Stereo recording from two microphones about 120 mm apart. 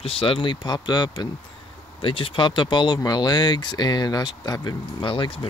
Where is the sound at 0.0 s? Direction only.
45° left (ahead or behind).